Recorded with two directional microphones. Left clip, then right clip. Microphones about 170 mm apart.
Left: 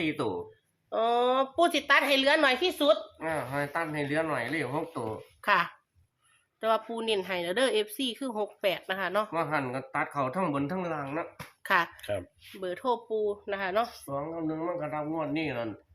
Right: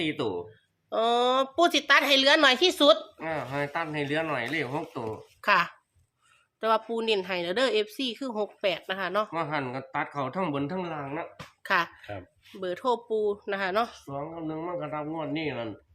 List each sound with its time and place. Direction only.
0.0 s a woman's voice: 10° right (ahead or behind)
0.9 s a woman's voice: 30° right (ahead or behind); by 3.0 s 60° right (ahead or behind)
3.2 s a woman's voice: 10° right (ahead or behind)
12.5 s speech: 20° right (ahead or behind)
14.1 s a woman's voice: 10° right (ahead or behind)